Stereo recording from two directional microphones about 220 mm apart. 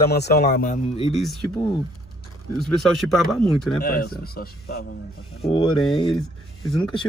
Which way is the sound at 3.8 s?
45° left (ahead or behind).